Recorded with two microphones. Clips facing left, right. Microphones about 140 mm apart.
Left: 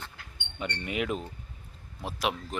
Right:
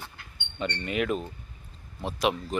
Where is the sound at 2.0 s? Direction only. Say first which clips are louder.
Right 4 dB; centre (ahead or behind).